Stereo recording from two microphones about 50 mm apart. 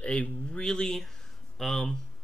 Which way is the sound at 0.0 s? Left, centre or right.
Left.